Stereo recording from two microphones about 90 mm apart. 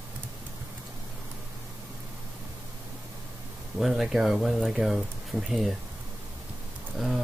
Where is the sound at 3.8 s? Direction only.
Centre (ahead or behind).